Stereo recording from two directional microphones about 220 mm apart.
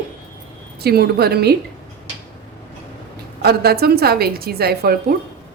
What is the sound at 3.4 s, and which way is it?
A woman's voice, 45° right (ahead or behind).